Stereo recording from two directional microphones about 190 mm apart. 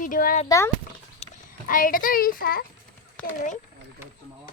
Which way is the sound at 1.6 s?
45° left (ahead or behind).